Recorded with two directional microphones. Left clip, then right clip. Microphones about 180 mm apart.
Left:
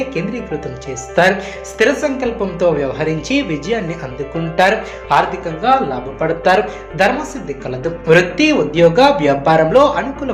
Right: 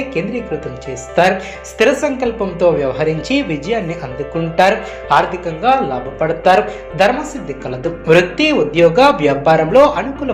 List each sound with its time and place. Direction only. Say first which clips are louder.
0.1 s speech: right 2 dB; 5° right (ahead or behind)
1.8 s speech: right 1 dB; 20° right (ahead or behind)